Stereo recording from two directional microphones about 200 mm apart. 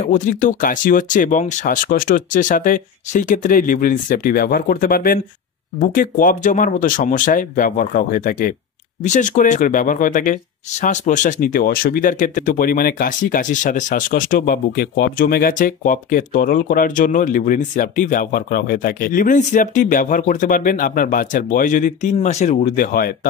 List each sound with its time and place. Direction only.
0.0 s speech: 40° left (ahead or behind)